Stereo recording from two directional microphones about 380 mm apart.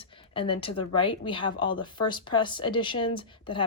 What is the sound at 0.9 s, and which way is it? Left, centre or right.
A woman's voice, centre.